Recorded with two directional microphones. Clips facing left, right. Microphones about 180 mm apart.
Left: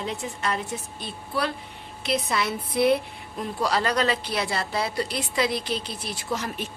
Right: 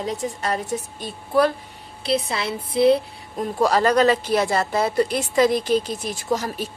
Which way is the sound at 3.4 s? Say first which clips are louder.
Right 6 dB; 45° right (ahead or behind).